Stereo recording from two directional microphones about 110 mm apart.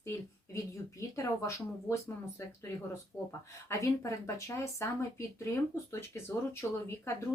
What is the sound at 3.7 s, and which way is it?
Speech, 30° left (ahead or behind).